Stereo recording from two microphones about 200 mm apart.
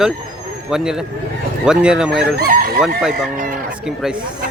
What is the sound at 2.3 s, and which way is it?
Chicken, 45° right (ahead or behind).